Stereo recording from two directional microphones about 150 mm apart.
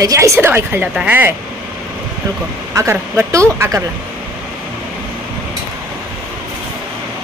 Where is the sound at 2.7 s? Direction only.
20° right (ahead or behind).